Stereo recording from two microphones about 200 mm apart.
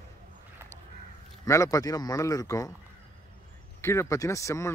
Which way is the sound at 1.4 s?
15° left (ahead or behind).